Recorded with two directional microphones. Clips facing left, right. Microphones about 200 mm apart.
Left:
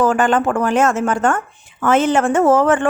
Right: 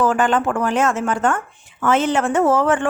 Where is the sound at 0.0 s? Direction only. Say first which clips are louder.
Left 2 dB; 45° left (ahead or behind).